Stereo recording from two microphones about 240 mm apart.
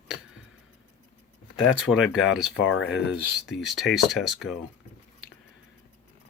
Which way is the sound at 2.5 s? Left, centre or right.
Left.